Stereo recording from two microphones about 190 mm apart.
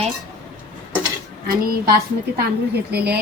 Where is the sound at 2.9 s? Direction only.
55° right (ahead or behind).